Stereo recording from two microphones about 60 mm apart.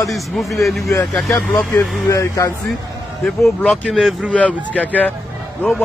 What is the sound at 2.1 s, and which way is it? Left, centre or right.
Speech, left.